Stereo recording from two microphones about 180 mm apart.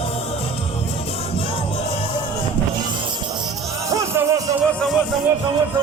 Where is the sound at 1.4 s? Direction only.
30° left (ahead or behind).